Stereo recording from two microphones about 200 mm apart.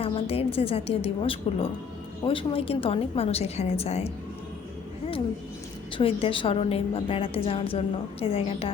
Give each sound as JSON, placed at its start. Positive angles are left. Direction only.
{"t": 0.0, "sound": "a woman's voice", "side_deg": 30}
{"t": 6.0, "sound": "a woman's voice", "side_deg": 25}